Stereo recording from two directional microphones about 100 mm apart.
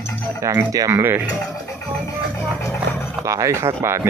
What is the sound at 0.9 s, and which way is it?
Speech, 20° right (ahead or behind).